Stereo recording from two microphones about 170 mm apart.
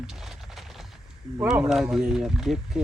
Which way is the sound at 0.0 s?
Centre (ahead or behind).